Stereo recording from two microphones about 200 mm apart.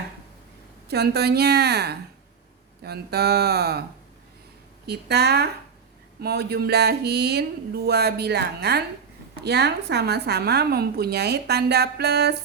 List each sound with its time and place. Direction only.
0.9 s a woman's voice: 55° right (ahead or behind)
4.9 s a woman's voice: 55° right (ahead or behind)